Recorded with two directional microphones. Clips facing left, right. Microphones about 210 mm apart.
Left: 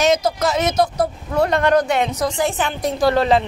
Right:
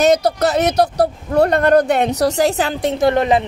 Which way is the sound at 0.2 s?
65° right (ahead or behind).